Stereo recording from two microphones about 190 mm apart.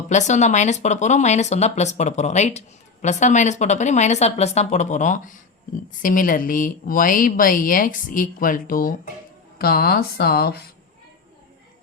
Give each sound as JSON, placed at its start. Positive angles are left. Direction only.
{"t": 0.1, "sound": "speech", "side_deg": 40}